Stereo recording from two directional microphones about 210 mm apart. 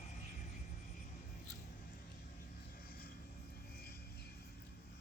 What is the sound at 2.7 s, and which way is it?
Vehicle, 45° left (ahead or behind).